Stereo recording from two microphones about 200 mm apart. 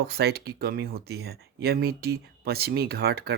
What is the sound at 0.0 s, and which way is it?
Speech, 55° right (ahead or behind).